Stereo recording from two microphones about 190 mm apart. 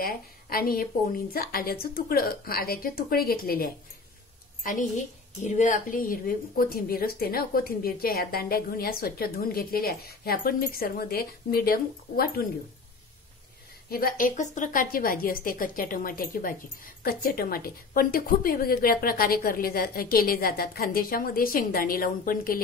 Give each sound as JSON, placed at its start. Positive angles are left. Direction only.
{"t": 0.0, "sound": "a woman's voice", "side_deg": 50}
{"t": 13.8, "sound": "a woman's voice", "side_deg": 50}